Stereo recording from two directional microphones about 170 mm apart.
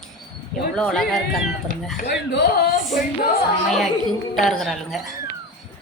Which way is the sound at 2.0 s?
70° left (ahead or behind).